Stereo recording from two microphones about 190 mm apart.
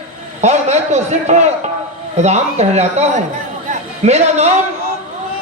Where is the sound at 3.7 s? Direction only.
35° right (ahead or behind).